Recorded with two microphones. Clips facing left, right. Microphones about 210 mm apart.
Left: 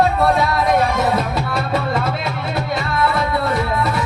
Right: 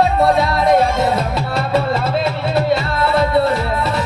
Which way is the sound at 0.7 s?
25° right (ahead or behind).